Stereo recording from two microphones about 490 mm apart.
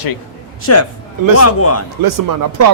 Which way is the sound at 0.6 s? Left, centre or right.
Left.